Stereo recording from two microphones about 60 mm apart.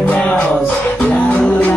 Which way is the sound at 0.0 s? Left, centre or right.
Left.